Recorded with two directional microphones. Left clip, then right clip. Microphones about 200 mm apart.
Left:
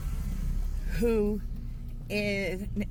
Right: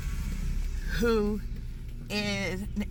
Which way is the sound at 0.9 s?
35° right (ahead or behind).